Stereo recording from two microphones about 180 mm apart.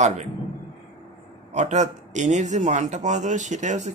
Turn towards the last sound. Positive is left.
turn(degrees=-40)  # may be behind; listen again after turning